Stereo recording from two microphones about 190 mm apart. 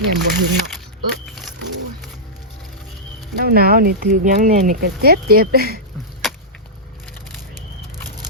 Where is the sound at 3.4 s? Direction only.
55° right (ahead or behind).